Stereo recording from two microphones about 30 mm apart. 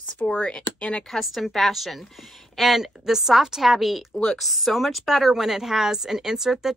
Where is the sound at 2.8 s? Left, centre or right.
Centre.